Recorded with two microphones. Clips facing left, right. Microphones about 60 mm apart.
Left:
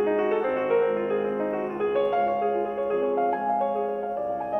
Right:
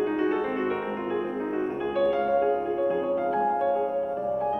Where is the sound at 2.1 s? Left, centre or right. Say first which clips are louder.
Even; left.